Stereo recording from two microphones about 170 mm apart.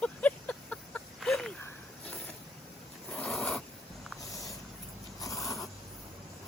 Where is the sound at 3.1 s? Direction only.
5° left (ahead or behind).